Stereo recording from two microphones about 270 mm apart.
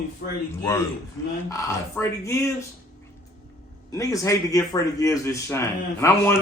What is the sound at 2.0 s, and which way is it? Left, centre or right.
Speech, centre.